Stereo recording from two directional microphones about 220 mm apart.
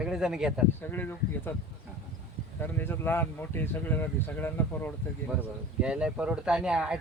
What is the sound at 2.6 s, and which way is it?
Speech, 10° left (ahead or behind).